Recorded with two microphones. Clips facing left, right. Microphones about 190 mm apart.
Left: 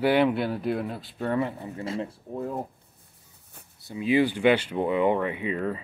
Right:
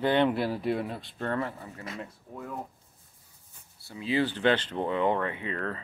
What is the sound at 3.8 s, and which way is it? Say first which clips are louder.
Speech: left 5 dB; 15° left (ahead or behind).